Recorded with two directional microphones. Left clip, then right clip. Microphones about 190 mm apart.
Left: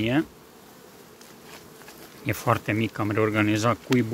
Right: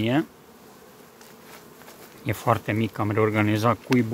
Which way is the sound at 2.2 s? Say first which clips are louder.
Right 1 dB; 10° right (ahead or behind).